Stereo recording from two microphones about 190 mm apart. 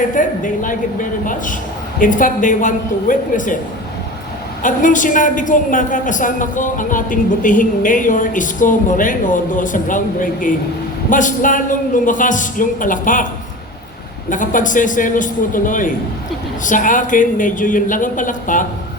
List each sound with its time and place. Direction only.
0.1 s a woman's voice: 45° left (ahead or behind)
4.6 s a woman's voice: 45° left (ahead or behind)
14.3 s a woman's voice: 45° left (ahead or behind)